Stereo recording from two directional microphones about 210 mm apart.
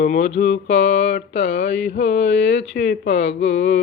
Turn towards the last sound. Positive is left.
turn(degrees=60)  # may be behind; listen again after turning